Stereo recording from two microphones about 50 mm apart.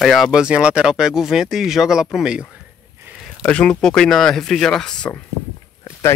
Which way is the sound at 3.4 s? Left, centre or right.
Left.